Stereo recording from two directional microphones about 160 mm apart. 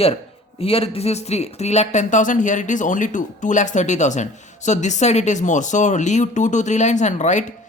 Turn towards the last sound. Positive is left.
turn(degrees=45)  # may be behind; listen again after turning